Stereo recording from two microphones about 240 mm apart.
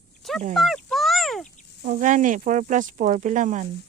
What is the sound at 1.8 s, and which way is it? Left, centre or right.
Speech, right.